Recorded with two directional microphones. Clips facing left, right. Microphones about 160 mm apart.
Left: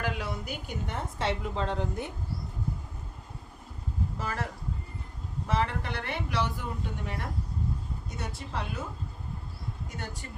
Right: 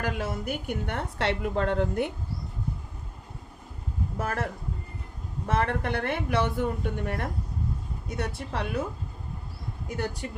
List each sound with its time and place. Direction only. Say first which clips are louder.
0.0 s a woman's voice: right 3 dB; 45° right (ahead or behind)
4.2 s a woman's voice: right 5 dB; 55° right (ahead or behind)
5.5 s a woman's voice: right 4 dB; 55° right (ahead or behind)